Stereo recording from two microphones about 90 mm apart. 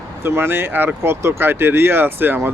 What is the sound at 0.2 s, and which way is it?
Speech, 25° right (ahead or behind).